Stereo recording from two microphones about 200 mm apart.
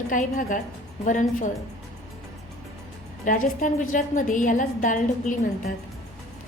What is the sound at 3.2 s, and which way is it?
A woman's voice, 40° left (ahead or behind).